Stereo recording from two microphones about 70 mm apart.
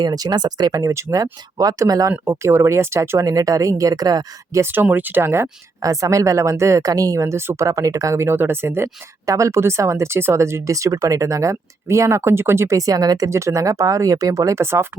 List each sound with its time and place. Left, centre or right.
0.0 s speech: right
2.2 s speech: right
4.6 s speech: right
5.8 s speech: right
7.6 s speech: right
9.2 s speech: right
13.3 s speech: right